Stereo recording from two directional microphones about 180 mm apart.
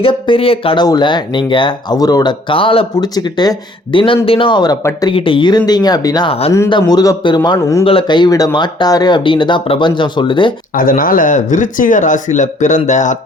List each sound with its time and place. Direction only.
0.0 s speech: 30° left (ahead or behind)
5.1 s speech: 30° left (ahead or behind)
10.8 s speech: 50° left (ahead or behind)